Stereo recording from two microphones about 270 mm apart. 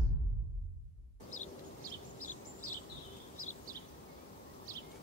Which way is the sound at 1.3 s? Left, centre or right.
Left.